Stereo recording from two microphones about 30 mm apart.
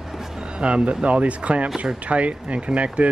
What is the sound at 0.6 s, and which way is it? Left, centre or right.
Speech, right.